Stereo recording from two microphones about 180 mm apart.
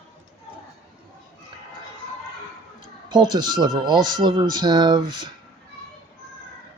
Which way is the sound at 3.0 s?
25° right (ahead or behind).